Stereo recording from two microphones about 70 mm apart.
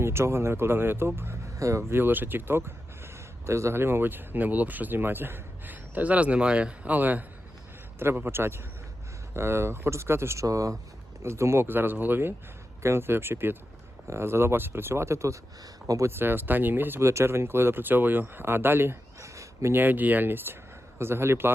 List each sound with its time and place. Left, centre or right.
0.0 s speech: right
1.5 s speech: right
1.9 s speech: right
10.4 s speech: right
16.0 s speech: right
17.0 s speech: right
19.2 s a sound: right
19.7 s speech: right